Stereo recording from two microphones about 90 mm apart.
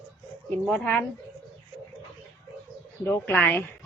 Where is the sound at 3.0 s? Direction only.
25° left (ahead or behind).